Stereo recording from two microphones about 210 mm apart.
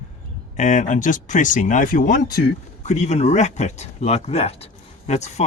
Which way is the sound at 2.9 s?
35° left (ahead or behind).